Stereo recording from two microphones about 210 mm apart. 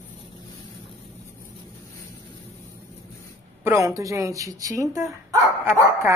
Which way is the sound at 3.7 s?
15° right (ahead or behind).